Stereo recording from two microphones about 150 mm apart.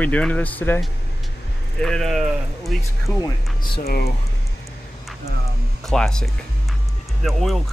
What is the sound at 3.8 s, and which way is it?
Speech, 90° left.